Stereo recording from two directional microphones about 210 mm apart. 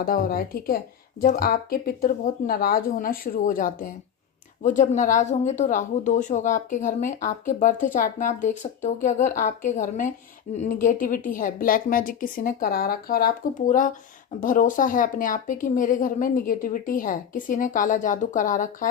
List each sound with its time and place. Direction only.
0.0 s speech: 45° left (ahead or behind)